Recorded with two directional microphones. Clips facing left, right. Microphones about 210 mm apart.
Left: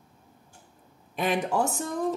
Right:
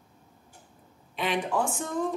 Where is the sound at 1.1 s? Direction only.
45° left (ahead or behind).